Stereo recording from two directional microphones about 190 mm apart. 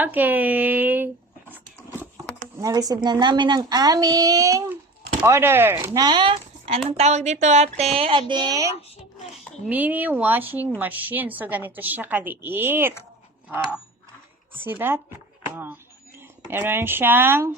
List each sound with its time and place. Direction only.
0.0 s speech: 10° right (ahead or behind)
2.6 s a woman's voice: 20° right (ahead or behind)
9.6 s a woman's voice: 10° right (ahead or behind)
13.5 s a sound: 5° right (ahead or behind)
14.5 s a woman's voice: 10° right (ahead or behind)